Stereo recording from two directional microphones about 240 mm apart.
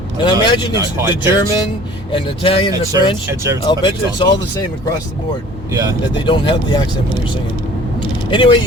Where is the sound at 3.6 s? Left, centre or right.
Centre.